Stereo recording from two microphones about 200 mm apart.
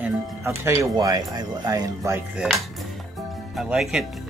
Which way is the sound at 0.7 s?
20° right (ahead or behind).